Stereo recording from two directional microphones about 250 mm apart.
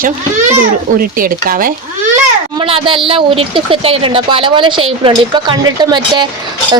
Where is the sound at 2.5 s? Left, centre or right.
Right.